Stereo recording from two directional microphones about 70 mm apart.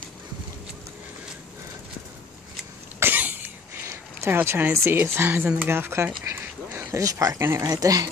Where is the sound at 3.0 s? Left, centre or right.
Right.